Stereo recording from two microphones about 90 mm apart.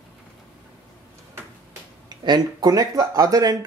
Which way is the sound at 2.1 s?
50° right (ahead or behind).